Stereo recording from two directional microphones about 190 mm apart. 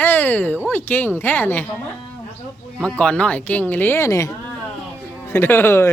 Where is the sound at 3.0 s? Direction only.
5° left (ahead or behind).